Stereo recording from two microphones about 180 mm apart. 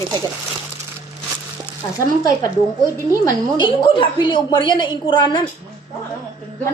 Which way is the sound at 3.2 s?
25° left (ahead or behind).